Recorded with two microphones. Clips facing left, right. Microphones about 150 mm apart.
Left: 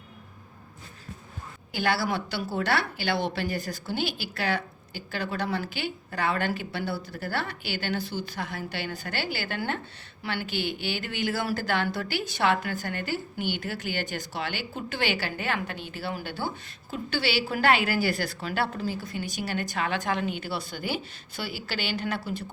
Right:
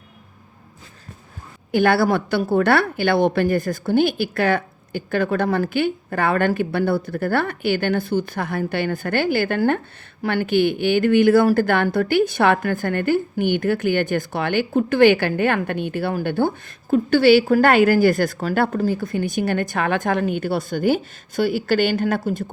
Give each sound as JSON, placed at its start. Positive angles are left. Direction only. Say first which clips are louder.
{"t": 1.7, "sound": "a woman's voice", "louder": "right 10 dB", "side_deg": -55}